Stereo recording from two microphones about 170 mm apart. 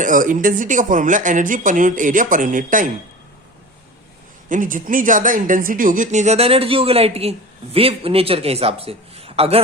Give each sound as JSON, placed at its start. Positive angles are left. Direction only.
{"t": 0.0, "sound": "speech", "side_deg": -50}
{"t": 4.4, "sound": "speech", "side_deg": -50}